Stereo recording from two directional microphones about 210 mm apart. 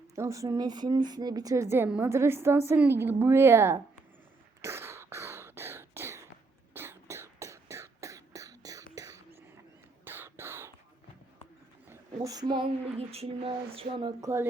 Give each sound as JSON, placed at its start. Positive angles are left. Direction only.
{"t": 0.2, "sound": "a woman's voice", "side_deg": -15}
{"t": 4.6, "sound": "cough", "side_deg": -10}
{"t": 6.7, "sound": "a sound", "side_deg": -10}
{"t": 10.0, "sound": "cough", "side_deg": -10}
{"t": 11.9, "sound": "speech", "side_deg": -15}